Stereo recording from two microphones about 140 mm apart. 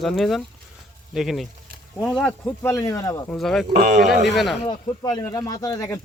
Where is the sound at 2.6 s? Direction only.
20° left (ahead or behind).